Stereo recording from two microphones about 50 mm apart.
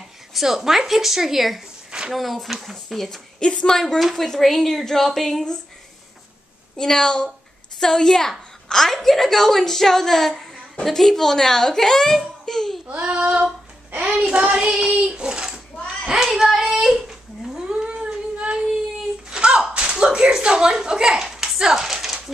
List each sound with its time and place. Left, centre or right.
0.3 s speech: centre
1.9 s a sound: centre
2.1 s speech: centre
3.3 s a woman's voice: centre
6.8 s a woman's voice: centre
13.1 s child singing: right
14.1 s child singing: centre
16.3 s child singing: centre
17.6 s a sound: centre
19.3 s slap: centre